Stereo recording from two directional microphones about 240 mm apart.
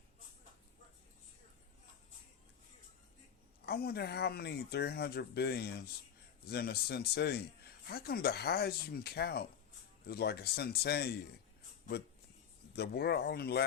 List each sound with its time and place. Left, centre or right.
3.7 s speech: left
12.7 s speech: left